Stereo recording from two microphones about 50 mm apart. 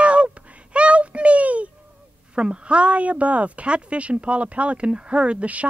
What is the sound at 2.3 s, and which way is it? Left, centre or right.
Speech, centre.